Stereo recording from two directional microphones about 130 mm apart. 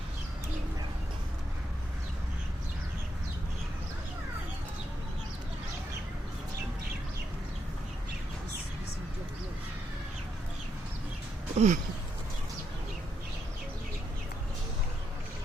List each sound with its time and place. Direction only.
11.5 s speech: 65° right (ahead or behind)